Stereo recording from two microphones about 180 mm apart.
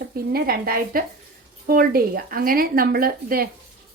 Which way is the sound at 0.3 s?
60° right (ahead or behind).